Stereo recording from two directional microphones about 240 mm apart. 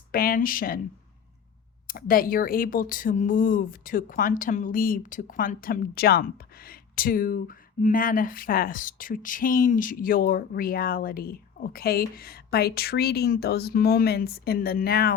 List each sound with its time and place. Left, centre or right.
0.1 s speech: left
1.9 s speech: left